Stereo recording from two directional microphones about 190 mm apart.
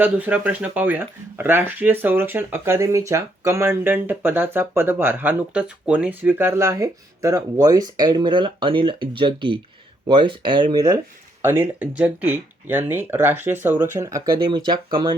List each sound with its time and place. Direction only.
0.0 s speech: 10° right (ahead or behind)